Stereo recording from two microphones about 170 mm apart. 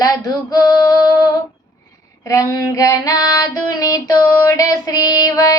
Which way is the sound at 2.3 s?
20° left (ahead or behind).